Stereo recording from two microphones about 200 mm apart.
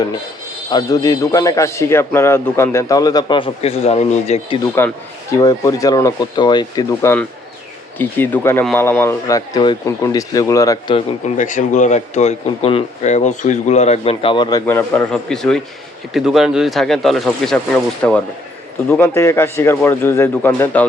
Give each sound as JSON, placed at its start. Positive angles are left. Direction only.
{"t": 0.7, "sound": "a man's voice", "side_deg": 20}
{"t": 5.3, "sound": "a man's voice", "side_deg": 15}
{"t": 14.7, "sound": "a man's voice", "side_deg": 10}